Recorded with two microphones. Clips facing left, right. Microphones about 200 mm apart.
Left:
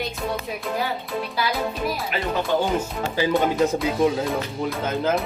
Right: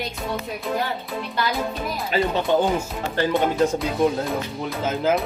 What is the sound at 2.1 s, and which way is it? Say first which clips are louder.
Speech: right 4 dB; 20° right (ahead or behind).